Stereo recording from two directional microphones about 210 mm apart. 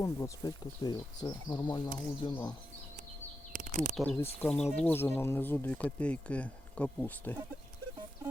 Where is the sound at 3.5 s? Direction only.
35° right (ahead or behind).